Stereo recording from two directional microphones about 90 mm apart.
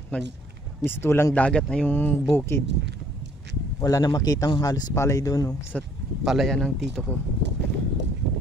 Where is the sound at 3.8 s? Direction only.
40° left (ahead or behind).